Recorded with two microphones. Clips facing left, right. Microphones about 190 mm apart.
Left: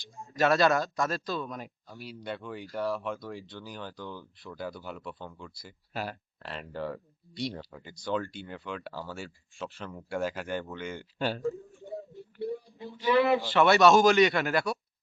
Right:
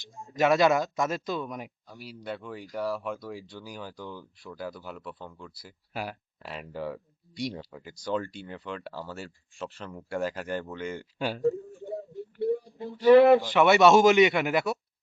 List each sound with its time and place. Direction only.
0.3 s speech: 15° right (ahead or behind)
1.9 s speech: centre (ahead or behind)
12.1 s a sound: centre (ahead or behind)
13.1 s speech: 55° right (ahead or behind)
13.4 s speech: 15° right (ahead or behind)